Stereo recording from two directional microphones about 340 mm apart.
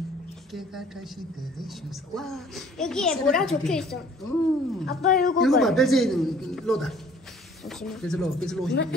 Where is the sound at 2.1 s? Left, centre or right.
Centre.